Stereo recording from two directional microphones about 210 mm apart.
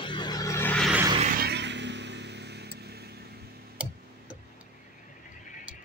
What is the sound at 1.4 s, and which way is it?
Vehicle, 55° right (ahead or behind).